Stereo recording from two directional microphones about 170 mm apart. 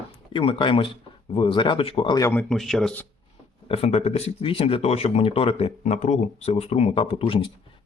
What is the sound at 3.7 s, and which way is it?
Speech, 40° left (ahead or behind).